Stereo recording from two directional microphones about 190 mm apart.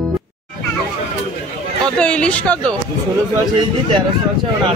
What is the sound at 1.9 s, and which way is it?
Speech, 5° left (ahead or behind).